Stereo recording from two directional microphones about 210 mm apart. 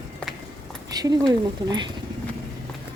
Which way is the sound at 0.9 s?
20° right (ahead or behind).